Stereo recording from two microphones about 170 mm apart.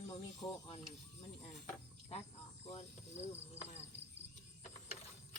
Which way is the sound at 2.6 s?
40° left (ahead or behind).